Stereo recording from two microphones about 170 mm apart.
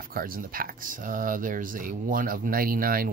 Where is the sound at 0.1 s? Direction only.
55° right (ahead or behind).